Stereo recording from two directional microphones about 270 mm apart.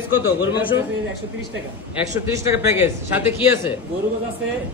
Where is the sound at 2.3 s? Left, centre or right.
Centre.